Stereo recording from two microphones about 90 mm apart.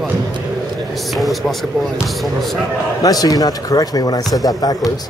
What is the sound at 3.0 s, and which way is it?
Speech, 40° left (ahead or behind).